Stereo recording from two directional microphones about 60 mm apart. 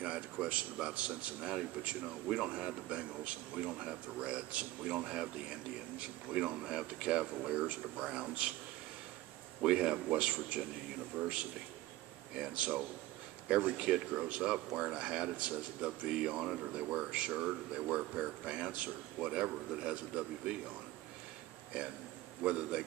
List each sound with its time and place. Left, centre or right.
0.0 s a man's voice: centre
9.6 s a man's voice: centre; by 11.3 s right
12.4 s a man's voice: right
21.7 s speech: centre